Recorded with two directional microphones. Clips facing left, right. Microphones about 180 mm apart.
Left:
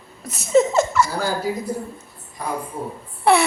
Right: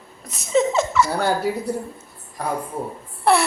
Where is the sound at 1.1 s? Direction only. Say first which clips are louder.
Right 2 dB; 65° right (ahead or behind).